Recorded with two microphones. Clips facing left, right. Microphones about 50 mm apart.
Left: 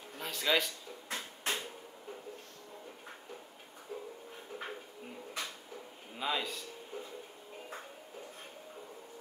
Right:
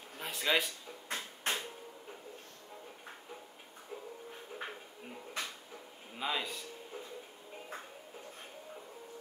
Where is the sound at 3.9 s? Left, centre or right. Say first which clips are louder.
Left 3 dB; centre.